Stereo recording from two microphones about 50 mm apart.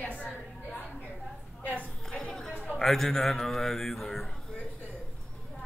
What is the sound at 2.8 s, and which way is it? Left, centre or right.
Speech, centre.